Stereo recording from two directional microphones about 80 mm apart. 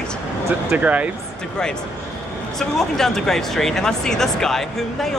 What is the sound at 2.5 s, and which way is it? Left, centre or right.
Speech, centre.